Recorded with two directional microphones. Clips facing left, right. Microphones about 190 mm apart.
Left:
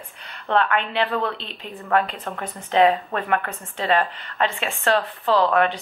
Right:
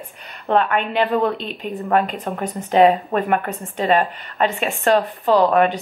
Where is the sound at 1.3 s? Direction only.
50° right (ahead or behind).